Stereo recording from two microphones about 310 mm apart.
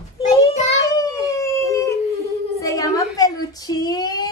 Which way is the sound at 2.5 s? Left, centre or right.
Centre.